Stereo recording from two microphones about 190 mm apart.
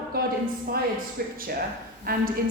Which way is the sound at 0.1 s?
50° right (ahead or behind).